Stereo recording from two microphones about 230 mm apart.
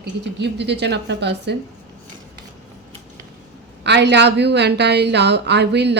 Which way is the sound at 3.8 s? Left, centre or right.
Right.